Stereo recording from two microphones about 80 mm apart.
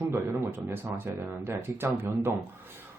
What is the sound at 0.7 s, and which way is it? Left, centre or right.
Speech, right.